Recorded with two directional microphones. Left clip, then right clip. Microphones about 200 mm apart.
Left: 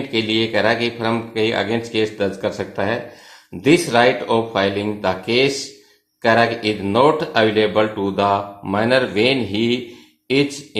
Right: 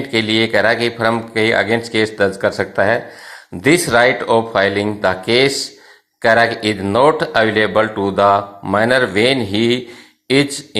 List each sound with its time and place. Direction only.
0.1 s speech: 25° right (ahead or behind)